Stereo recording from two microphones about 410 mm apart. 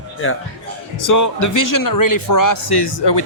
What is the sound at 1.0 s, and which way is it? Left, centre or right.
A man's voice, left.